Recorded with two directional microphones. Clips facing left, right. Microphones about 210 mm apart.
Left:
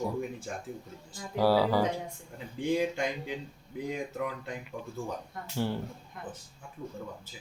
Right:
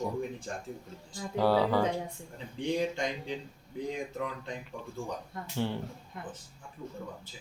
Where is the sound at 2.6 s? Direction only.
5° left (ahead or behind).